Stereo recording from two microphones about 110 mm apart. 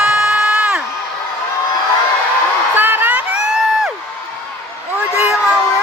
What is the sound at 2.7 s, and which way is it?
Crowd, 20° right (ahead or behind).